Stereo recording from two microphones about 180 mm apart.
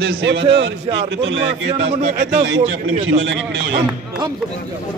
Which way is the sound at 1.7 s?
35° right (ahead or behind).